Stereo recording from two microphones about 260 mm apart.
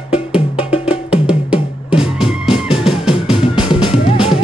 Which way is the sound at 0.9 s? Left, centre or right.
Centre.